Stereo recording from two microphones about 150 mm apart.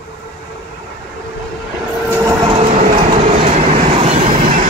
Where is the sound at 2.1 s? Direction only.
20° right (ahead or behind).